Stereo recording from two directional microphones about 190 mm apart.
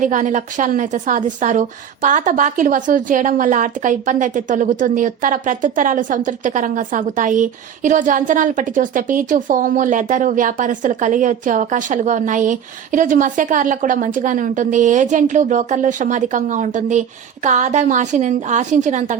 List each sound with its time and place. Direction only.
0.0 s a woman's voice: 45° right (ahead or behind)